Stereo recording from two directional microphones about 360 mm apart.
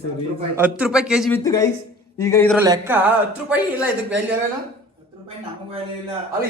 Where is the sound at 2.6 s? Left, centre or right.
Centre.